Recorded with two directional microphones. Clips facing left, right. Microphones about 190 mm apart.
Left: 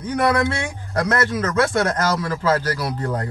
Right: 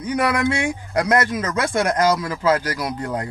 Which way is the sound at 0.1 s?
15° right (ahead or behind).